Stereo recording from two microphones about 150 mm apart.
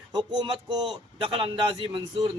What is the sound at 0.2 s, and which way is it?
A man's voice, 30° right (ahead or behind).